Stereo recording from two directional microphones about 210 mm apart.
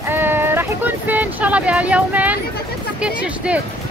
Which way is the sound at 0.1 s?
10° right (ahead or behind).